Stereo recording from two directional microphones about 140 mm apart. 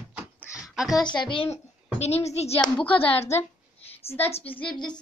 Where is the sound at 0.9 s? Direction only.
35° left (ahead or behind).